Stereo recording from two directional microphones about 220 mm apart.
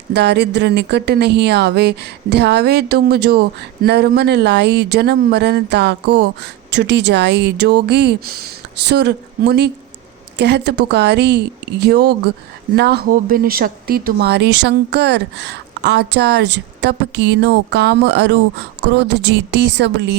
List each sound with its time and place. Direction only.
0.1 s speech: 50° right (ahead or behind)